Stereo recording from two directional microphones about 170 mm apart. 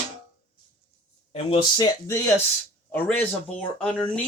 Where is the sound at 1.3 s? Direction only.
30° left (ahead or behind).